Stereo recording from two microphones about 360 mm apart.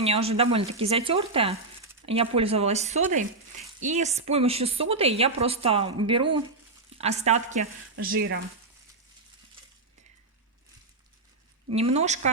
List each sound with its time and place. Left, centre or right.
0.0 s speech: centre
7.0 s speech: centre
11.7 s speech: centre